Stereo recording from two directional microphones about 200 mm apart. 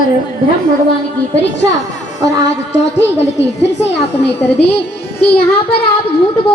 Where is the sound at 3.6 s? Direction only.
60° left (ahead or behind).